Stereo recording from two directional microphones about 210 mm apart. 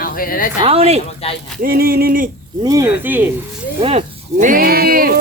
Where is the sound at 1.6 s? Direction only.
45° right (ahead or behind).